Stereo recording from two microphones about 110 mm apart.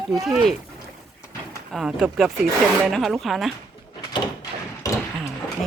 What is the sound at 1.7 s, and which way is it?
Speech, 5° right (ahead or behind).